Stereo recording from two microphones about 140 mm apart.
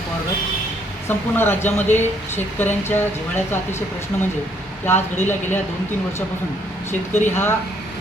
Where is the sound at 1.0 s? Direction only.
15° left (ahead or behind).